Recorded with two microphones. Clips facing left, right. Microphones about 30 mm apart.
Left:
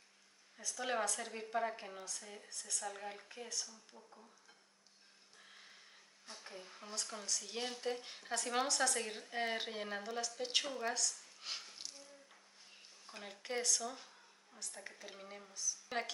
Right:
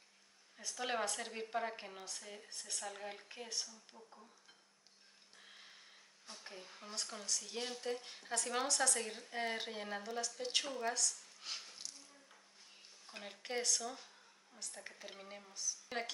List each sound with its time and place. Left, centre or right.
0.6 s a woman's voice: right
1.4 s a woman's voice: centre
3.3 s a woman's voice: right
3.9 s speech: centre
5.4 s a sound: centre
6.5 s speech: centre
13.1 s a woman's voice: centre